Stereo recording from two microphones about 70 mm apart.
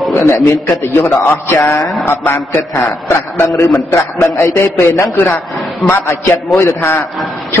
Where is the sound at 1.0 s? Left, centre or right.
Left.